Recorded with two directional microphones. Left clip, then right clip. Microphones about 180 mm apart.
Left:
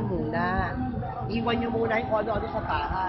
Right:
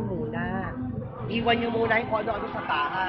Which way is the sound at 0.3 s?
90° left.